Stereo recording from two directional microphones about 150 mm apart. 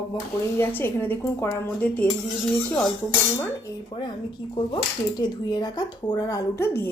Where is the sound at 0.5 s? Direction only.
15° left (ahead or behind).